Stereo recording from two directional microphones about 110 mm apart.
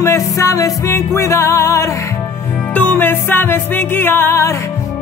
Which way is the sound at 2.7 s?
15° left (ahead or behind).